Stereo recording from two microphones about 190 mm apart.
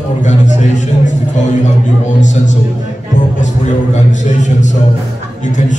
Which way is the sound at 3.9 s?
40° left (ahead or behind).